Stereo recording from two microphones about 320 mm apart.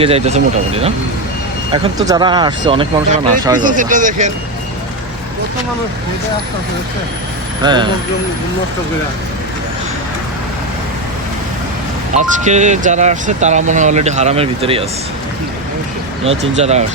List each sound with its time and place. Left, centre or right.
0.0 s speech: centre
7.6 s speech: centre
12.1 s speech: right
16.2 s speech: centre